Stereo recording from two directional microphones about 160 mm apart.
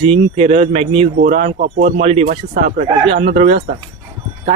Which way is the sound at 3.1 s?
40° right (ahead or behind).